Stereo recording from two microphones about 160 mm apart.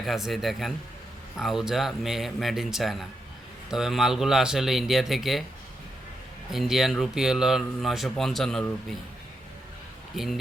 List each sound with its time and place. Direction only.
0.0 s a man's voice: centre (ahead or behind)
6.5 s a man's voice: centre (ahead or behind)